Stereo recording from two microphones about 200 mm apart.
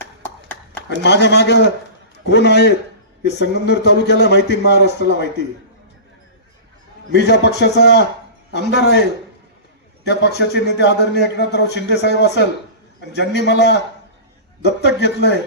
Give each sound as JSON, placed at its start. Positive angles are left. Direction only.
{"t": 0.0, "sound": "a sound", "side_deg": 10}
{"t": 1.0, "sound": "a man's voice", "side_deg": 60}
{"t": 7.1, "sound": "a man's voice", "side_deg": 55}